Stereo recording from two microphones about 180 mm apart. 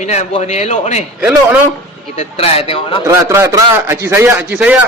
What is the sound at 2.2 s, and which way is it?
Speech, 35° left (ahead or behind).